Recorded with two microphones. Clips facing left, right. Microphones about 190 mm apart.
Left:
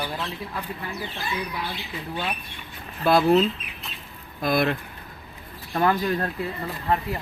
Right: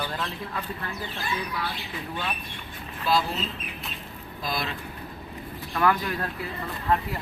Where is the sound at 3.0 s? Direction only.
55° left (ahead or behind).